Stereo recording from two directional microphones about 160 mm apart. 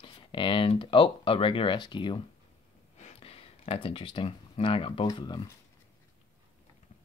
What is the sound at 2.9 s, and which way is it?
Speech, 40° left (ahead or behind).